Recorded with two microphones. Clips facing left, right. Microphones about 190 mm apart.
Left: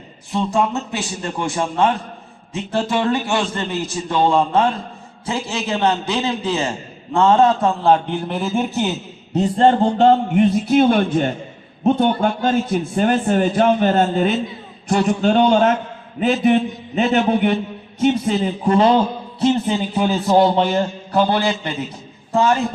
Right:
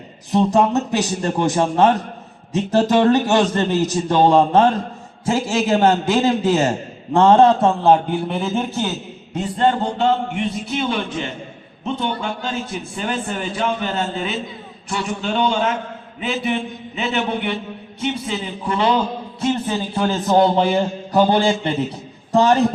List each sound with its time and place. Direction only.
0.3 s a man's voice: 40° right (ahead or behind)
8.3 s speech: 5° left (ahead or behind)
9.3 s a man's voice: 40° left (ahead or behind)
19.5 s speech: 20° left (ahead or behind)
20.6 s a man's voice: 10° right (ahead or behind)
21.6 s a man's voice: 30° right (ahead or behind)